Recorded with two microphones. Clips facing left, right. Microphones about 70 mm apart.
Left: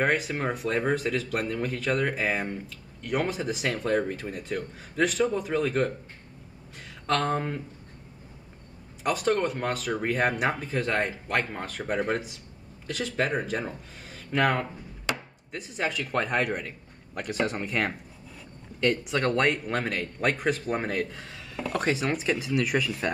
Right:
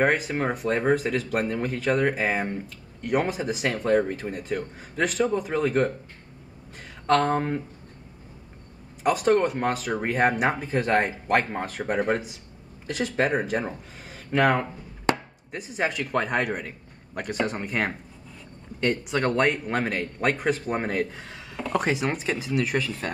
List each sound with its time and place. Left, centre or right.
0.0 s a man's voice: centre
7.1 s speech: centre
9.0 s a man's voice: centre
15.1 s chopping: right
15.5 s a man's voice: centre